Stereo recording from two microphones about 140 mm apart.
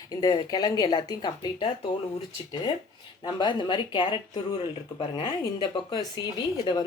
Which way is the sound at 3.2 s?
35° left (ahead or behind).